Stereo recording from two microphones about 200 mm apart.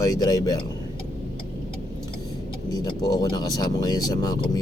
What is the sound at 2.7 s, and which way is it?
Speech, 20° left (ahead or behind).